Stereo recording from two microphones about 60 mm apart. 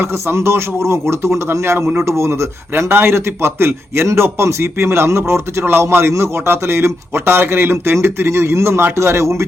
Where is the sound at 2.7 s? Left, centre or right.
Right.